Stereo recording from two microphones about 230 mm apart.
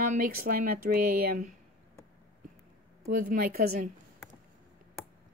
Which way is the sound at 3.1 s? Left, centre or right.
Right.